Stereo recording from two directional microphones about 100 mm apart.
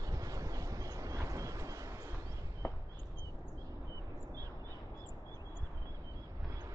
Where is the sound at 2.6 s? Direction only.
10° left (ahead or behind).